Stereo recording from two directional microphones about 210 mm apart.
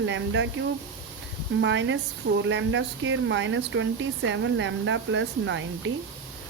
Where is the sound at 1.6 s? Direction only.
60° right (ahead or behind).